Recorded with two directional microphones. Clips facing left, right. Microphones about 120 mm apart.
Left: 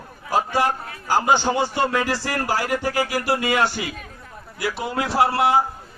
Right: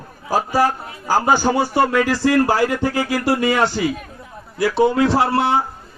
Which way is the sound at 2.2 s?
20° right (ahead or behind).